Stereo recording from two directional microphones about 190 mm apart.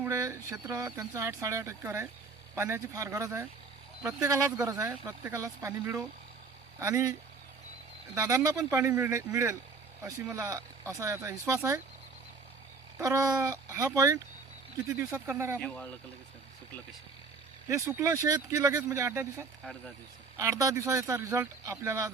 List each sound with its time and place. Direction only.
0.0 s speech: 15° right (ahead or behind)
13.0 s speech: 20° right (ahead or behind)
15.5 s speech: 5° left (ahead or behind)
17.7 s speech: 15° right (ahead or behind)